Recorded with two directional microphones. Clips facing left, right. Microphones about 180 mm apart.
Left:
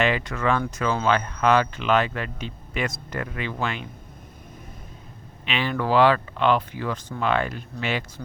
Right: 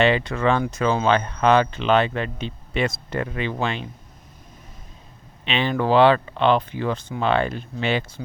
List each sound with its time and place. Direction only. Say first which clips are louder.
0.0 s speech: right 4 dB; 30° right (ahead or behind)
5.5 s speech: right 3 dB; 25° right (ahead or behind)